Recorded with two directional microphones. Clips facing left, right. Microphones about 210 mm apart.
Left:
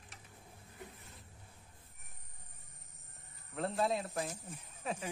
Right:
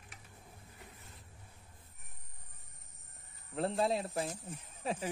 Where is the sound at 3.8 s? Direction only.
30° right (ahead or behind).